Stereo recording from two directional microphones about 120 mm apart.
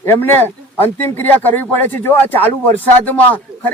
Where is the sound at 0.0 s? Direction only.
20° left (ahead or behind).